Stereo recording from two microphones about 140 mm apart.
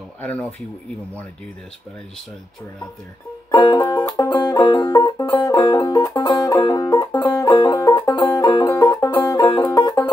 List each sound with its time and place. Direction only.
0.2 s speech: 10° left (ahead or behind)
3.5 s music: 30° left (ahead or behind); by 7.4 s 15° left (ahead or behind)
7.4 s music: 30° left (ahead or behind)